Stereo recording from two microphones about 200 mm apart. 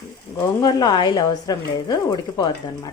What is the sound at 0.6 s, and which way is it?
Speech, 20° left (ahead or behind).